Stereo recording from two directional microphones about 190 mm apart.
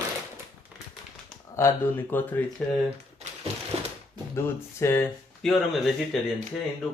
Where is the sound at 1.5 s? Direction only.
15° left (ahead or behind).